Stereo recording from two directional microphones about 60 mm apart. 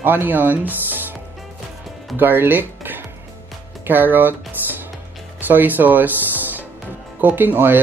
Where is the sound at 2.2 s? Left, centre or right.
Right.